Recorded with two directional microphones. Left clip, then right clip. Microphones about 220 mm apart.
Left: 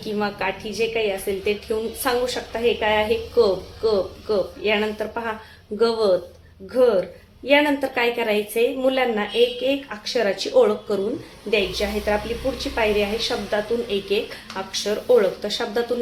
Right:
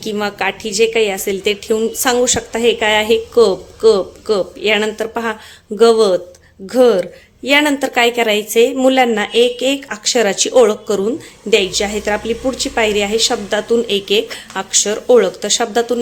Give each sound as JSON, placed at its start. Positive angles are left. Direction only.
{"t": 0.0, "sound": "a woman's voice", "side_deg": -45}